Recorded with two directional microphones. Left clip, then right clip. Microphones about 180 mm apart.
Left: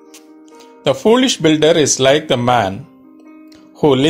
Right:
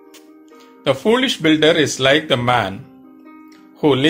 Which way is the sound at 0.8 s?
50° left (ahead or behind).